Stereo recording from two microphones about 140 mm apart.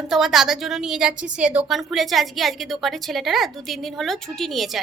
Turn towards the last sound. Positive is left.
turn(degrees=0)  # may be behind; listen again after turning